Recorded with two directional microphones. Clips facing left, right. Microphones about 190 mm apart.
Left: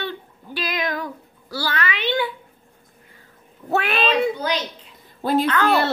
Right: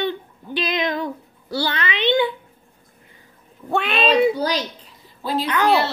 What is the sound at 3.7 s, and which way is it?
Speech, 5° left (ahead or behind).